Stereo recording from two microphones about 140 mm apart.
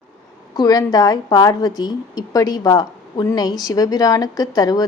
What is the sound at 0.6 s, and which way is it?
A woman's voice, 30° left (ahead or behind).